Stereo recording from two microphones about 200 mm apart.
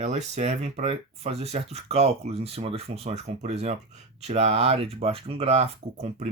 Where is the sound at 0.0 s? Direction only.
35° right (ahead or behind).